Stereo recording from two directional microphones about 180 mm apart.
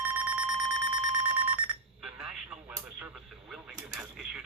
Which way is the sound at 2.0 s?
5° right (ahead or behind).